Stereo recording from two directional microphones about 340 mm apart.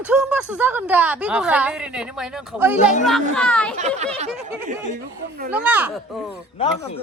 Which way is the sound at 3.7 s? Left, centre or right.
Centre.